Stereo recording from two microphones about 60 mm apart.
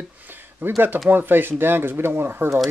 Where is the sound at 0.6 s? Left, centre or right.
Right.